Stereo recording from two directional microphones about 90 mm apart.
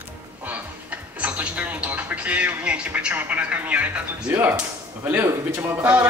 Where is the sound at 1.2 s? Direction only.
15° right (ahead or behind).